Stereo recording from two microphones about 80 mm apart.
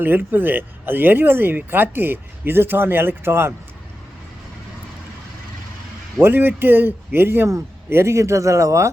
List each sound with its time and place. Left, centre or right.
0.0 s speech: right
6.1 s a man's voice: right